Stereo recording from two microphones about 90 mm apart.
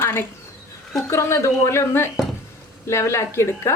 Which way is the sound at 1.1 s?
35° left (ahead or behind).